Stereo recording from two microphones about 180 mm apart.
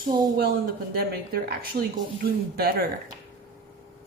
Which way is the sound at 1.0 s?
60° right (ahead or behind).